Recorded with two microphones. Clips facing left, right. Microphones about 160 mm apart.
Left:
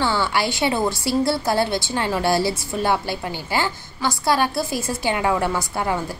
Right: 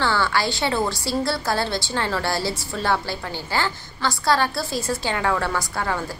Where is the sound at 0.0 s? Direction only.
20° left (ahead or behind).